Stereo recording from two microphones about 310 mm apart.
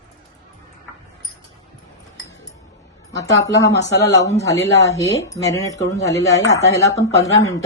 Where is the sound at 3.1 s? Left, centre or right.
Centre.